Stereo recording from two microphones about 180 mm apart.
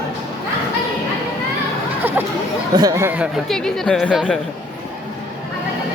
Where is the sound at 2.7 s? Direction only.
20° right (ahead or behind).